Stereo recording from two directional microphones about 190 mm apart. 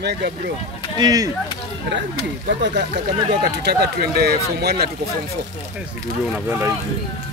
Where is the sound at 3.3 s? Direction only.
60° right (ahead or behind).